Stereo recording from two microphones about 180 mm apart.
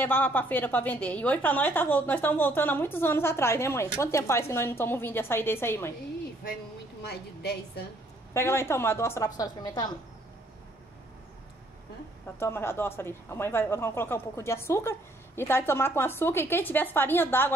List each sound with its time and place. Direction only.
0.0 s a woman's voice: 10° left (ahead or behind)
7.0 s a woman's voice: 65° left (ahead or behind)
8.3 s a woman's voice: 15° left (ahead or behind)
12.4 s a woman's voice: 15° left (ahead or behind)